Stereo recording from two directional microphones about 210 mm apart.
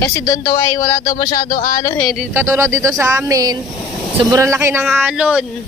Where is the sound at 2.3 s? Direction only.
15° right (ahead or behind).